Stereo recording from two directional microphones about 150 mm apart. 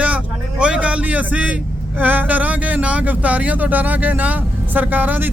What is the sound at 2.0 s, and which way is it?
Speech, 10° right (ahead or behind).